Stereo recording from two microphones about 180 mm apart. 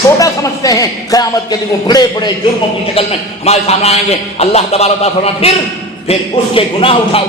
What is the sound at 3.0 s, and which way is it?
A man's voice, 35° left (ahead or behind).